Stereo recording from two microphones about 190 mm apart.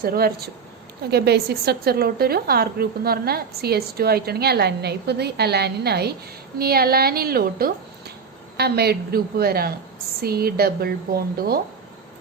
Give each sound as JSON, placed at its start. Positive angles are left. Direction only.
{"t": 0.0, "sound": "a woman's voice", "side_deg": -50}